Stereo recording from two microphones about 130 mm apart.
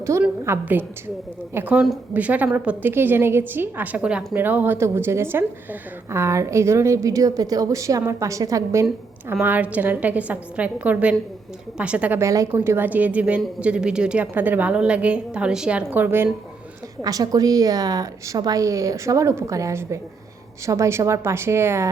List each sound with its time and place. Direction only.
0.0 s a woman's voice: 20° right (ahead or behind)
12.2 s a woman's voice: 25° right (ahead or behind)
12.7 s a woman's voice: 15° right (ahead or behind)
17.0 s a woman's voice: 30° right (ahead or behind)